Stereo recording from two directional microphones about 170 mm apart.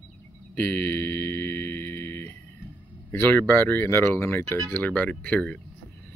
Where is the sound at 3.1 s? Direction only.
15° left (ahead or behind).